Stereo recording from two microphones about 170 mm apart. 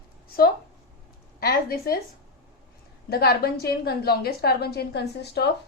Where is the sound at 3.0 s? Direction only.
65° left (ahead or behind).